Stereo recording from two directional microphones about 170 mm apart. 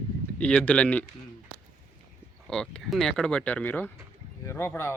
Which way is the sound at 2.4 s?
5° left (ahead or behind).